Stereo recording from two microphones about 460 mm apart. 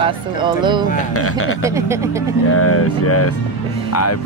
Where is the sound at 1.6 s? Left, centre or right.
Centre.